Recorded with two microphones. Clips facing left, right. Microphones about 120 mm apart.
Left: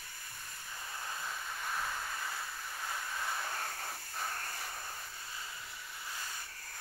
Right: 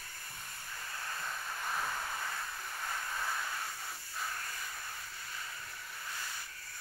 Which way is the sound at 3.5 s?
40° left (ahead or behind).